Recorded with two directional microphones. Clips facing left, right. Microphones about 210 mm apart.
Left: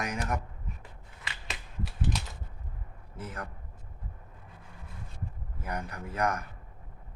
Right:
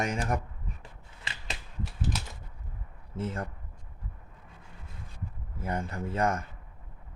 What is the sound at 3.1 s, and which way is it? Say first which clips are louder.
Speech: right 6 dB; 25° right (ahead or behind).